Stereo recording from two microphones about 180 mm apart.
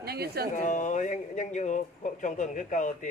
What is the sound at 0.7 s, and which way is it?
Speech, 45° left (ahead or behind).